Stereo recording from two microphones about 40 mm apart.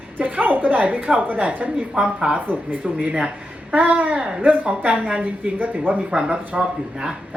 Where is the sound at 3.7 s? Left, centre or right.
Right.